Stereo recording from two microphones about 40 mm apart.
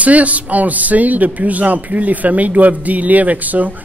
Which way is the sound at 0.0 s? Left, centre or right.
Right.